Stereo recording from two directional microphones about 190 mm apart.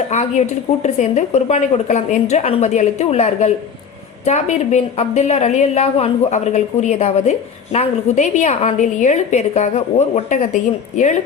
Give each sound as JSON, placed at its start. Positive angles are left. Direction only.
{"t": 0.1, "sound": "a woman's voice", "side_deg": 35}